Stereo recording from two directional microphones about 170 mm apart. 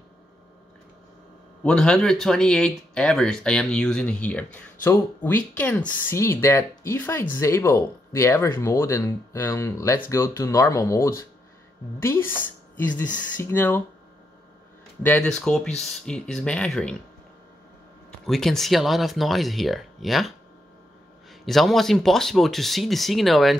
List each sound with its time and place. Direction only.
1.6 s speech: 5° left (ahead or behind)
15.0 s speech: 5° left (ahead or behind)
18.2 s speech: centre (ahead or behind)